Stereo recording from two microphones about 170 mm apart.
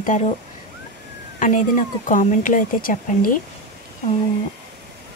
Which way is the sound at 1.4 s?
50° left (ahead or behind).